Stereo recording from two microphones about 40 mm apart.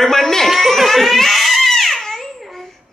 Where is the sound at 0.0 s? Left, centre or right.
Centre.